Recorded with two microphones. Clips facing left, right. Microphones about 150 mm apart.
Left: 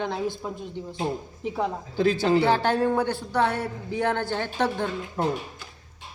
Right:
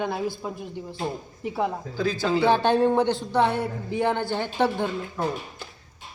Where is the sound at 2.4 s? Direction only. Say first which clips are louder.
Right 2 dB; 20° right (ahead or behind).